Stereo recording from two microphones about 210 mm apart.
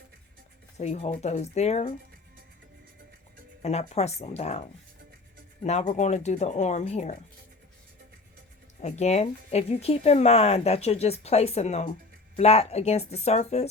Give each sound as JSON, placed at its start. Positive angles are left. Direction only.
{"t": 0.8, "sound": "speech", "side_deg": 35}
{"t": 3.6, "sound": "speech", "side_deg": 30}
{"t": 5.6, "sound": "speech", "side_deg": 35}
{"t": 8.8, "sound": "speech", "side_deg": 30}